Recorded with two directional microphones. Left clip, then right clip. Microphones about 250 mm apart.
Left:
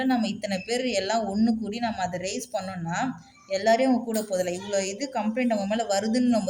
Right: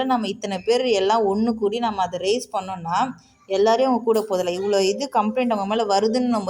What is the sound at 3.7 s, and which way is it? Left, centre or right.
Speech, centre.